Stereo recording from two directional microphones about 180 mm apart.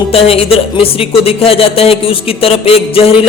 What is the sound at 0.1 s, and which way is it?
Music, 30° left (ahead or behind).